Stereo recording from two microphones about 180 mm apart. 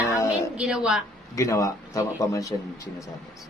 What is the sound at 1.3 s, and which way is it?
Speech, 20° left (ahead or behind).